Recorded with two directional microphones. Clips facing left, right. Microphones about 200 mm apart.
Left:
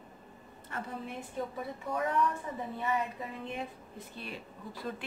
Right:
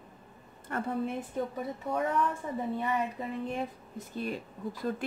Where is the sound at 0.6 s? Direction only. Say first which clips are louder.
Right 8 dB; 55° right (ahead or behind).